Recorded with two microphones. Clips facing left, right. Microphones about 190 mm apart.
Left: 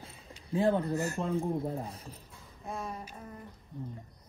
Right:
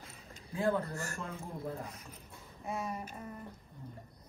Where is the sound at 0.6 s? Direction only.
25° left (ahead or behind).